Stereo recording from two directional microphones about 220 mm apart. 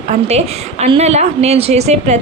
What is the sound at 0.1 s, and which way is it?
A woman's voice, 30° right (ahead or behind).